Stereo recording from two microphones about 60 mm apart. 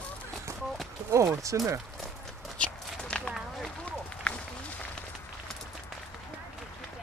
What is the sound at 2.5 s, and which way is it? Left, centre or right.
Walk, left.